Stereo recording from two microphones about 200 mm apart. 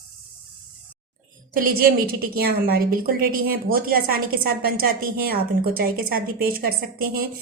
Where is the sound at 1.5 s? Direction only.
45° right (ahead or behind).